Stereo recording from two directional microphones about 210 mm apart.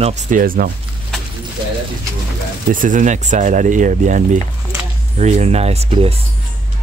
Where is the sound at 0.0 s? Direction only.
35° right (ahead or behind).